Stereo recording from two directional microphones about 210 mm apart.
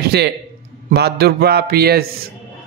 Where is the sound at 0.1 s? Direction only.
50° right (ahead or behind).